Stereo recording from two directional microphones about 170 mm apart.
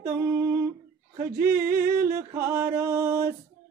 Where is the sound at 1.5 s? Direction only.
60° right (ahead or behind).